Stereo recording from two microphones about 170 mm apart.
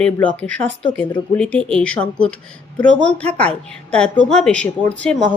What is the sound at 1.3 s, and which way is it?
A woman's voice, 5° left (ahead or behind).